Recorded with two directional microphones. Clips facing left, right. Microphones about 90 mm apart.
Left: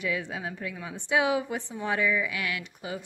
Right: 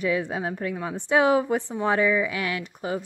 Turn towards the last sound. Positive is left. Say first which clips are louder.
# right 7 dB
turn(degrees=-40)  # may be behind; listen again after turning